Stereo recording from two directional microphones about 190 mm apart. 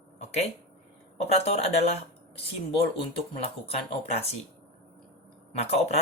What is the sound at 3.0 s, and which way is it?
Speech, 30° left (ahead or behind).